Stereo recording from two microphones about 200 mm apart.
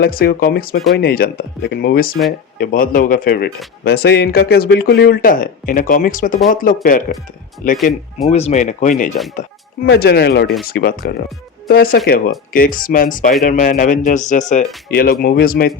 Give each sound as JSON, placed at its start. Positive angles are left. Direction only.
{"t": 0.0, "sound": "speech", "side_deg": 50}
{"t": 8.3, "sound": "speech", "side_deg": 30}
{"t": 10.0, "sound": "speech", "side_deg": 50}